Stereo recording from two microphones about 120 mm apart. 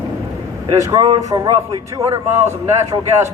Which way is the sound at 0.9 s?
35° right (ahead or behind).